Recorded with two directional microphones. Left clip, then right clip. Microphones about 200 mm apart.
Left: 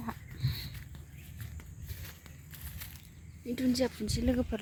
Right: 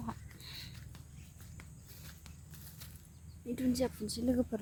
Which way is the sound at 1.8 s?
30° left (ahead or behind).